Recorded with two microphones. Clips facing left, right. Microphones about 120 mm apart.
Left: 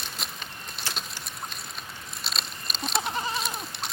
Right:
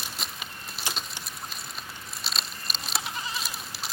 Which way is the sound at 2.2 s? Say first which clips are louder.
Even; centre (ahead or behind).